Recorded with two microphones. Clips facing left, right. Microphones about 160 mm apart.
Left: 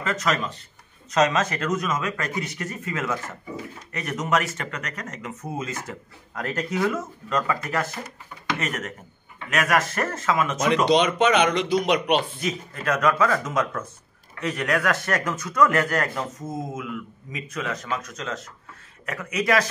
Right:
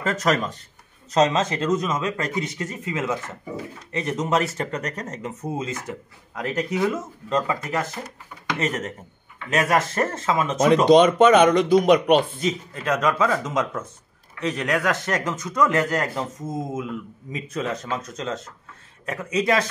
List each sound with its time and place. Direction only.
0.0 s speech: 40° right (ahead or behind)
1.1 s speech: 25° right (ahead or behind)
10.9 s speech: 50° right (ahead or behind)
12.4 s speech: 25° right (ahead or behind)